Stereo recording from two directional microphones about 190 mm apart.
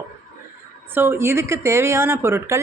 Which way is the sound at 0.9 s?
10° right (ahead or behind).